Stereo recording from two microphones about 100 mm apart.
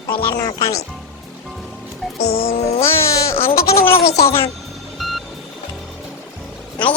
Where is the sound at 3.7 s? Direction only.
25° left (ahead or behind).